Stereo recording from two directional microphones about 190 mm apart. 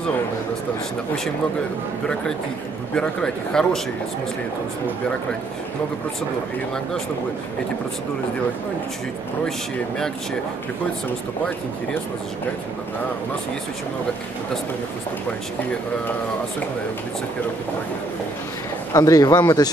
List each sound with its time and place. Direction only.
2.9 s a man's voice: 5° left (ahead or behind)
18.9 s speech: 20° left (ahead or behind)